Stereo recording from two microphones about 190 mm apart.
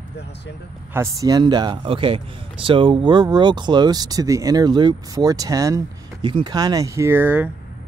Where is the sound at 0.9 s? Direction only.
15° right (ahead or behind).